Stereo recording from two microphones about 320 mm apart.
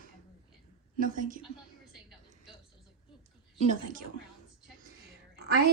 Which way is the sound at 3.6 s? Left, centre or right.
Right.